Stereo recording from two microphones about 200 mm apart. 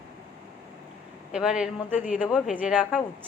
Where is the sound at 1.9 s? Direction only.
40° left (ahead or behind).